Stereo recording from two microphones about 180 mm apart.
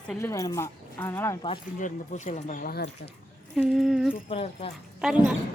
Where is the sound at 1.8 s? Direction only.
40° left (ahead or behind).